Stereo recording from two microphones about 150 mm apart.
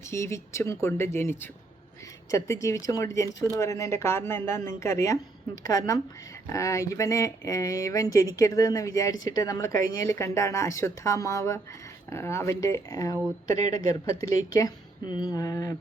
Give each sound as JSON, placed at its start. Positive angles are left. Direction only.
{"t": 0.1, "sound": "speech", "side_deg": 20}